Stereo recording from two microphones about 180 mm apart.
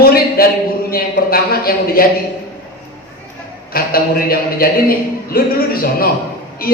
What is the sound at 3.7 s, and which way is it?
A man's voice, 55° left (ahead or behind).